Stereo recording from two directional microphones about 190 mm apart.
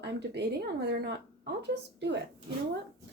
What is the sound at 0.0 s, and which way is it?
Speech, 65° right (ahead or behind).